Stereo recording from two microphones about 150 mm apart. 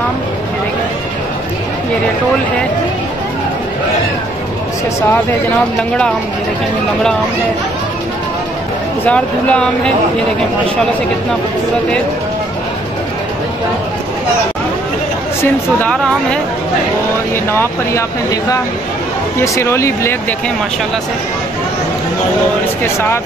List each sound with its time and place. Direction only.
9.0 s speech: 10° left (ahead or behind)
15.8 s speech: 5° left (ahead or behind)
17.5 s speech: 15° left (ahead or behind)